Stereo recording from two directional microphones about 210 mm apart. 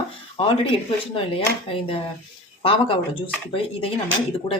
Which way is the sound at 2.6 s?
25° left (ahead or behind).